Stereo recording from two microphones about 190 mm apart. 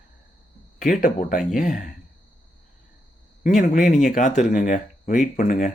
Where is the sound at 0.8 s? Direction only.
40° left (ahead or behind).